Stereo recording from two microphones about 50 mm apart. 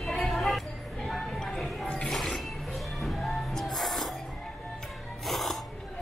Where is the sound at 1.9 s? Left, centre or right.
Centre.